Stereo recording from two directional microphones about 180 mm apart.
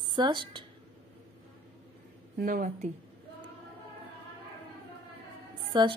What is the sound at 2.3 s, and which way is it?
Speech, 50° right (ahead or behind).